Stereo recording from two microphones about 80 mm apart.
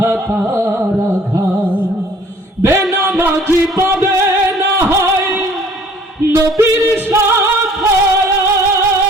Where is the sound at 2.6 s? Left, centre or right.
Right.